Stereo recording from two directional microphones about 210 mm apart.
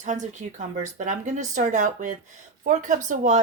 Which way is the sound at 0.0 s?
35° right (ahead or behind).